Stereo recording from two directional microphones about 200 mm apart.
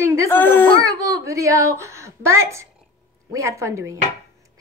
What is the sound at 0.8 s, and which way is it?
A woman's voice, 15° right (ahead or behind).